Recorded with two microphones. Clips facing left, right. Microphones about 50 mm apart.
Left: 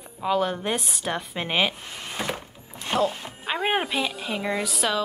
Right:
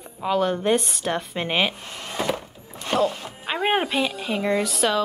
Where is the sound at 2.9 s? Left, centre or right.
Centre.